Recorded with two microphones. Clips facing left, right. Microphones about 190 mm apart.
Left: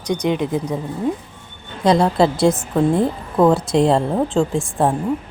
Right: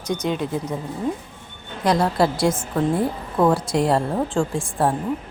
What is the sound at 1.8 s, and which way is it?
A woman's voice, 25° left (ahead or behind).